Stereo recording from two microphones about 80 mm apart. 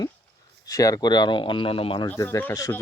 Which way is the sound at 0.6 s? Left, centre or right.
Left.